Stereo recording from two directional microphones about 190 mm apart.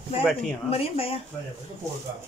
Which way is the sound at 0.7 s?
30° left (ahead or behind).